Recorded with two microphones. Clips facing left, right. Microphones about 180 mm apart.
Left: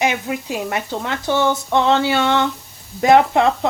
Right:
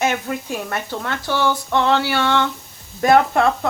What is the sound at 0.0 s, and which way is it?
Speech, 15° left (ahead or behind).